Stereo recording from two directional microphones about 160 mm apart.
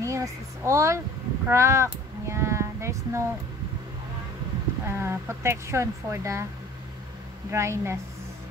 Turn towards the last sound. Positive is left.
turn(degrees=-15)  # may be behind; listen again after turning